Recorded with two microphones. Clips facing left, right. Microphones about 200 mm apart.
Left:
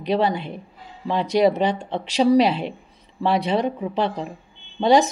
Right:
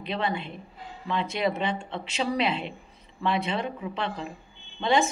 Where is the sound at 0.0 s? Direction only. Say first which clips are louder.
Left 8 dB; 40° left (ahead or behind).